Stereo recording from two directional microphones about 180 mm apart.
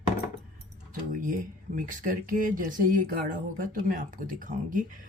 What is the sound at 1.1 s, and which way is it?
Speech, 50° right (ahead or behind).